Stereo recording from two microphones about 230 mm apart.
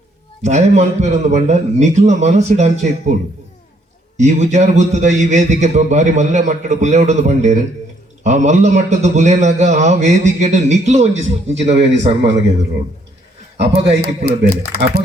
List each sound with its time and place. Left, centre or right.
0.4 s a man's voice: right
4.2 s a man's voice: right
14.3 s a man's voice: right